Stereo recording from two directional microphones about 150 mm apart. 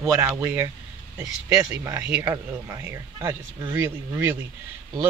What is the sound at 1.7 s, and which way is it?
Speech, 15° right (ahead or behind).